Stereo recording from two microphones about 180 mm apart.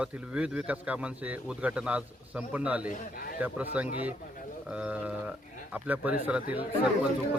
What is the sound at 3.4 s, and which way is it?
A man's voice, 10° right (ahead or behind).